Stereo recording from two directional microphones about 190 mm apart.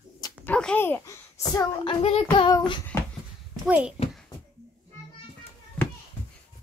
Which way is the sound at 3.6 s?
5° right (ahead or behind).